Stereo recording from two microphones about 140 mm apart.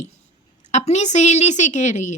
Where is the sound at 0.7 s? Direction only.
55° left (ahead or behind).